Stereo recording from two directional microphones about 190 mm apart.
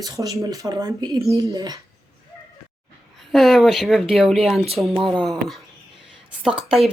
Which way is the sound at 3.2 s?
Centre (ahead or behind).